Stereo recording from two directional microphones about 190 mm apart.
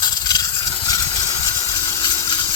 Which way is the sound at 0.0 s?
20° left (ahead or behind).